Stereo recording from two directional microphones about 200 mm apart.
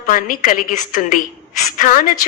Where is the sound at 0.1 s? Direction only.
45° left (ahead or behind).